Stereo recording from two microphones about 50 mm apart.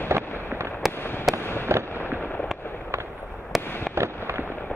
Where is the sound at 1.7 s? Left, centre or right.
Right.